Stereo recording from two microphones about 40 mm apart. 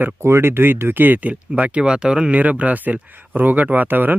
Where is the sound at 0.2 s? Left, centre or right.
Right.